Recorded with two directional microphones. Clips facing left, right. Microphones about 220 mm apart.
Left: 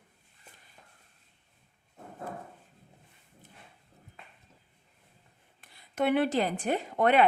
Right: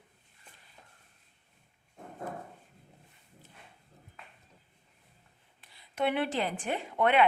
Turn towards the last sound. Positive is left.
turn(degrees=40)  # may be behind; listen again after turning